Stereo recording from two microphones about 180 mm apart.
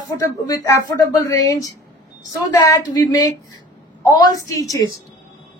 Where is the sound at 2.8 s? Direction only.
20° left (ahead or behind).